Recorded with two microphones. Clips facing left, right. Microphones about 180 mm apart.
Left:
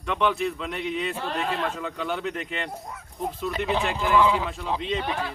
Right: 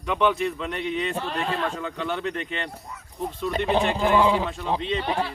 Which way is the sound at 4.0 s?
35° right (ahead or behind).